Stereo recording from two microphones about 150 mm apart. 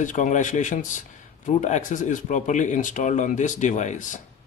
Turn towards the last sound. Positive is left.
turn(degrees=55)  # may be behind; listen again after turning